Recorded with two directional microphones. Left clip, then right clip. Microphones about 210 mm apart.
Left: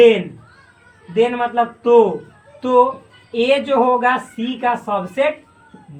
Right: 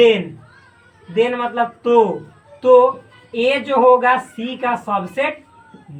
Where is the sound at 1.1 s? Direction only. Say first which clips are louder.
Left 1 dB; centre (ahead or behind).